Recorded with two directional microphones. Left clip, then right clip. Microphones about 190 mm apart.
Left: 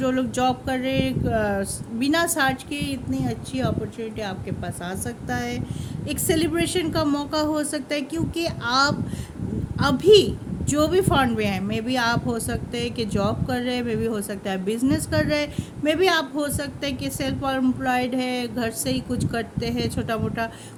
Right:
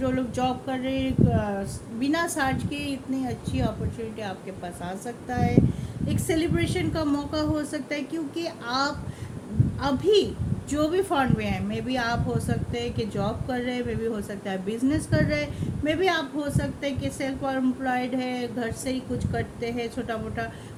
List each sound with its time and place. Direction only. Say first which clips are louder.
0.0 s a woman's voice: left 4 dB; 50° left (ahead or behind)
4.9 s a woman's voice: left 3 dB; 50° left (ahead or behind)